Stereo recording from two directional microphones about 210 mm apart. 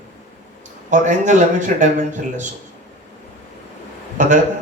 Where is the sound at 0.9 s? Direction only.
35° right (ahead or behind).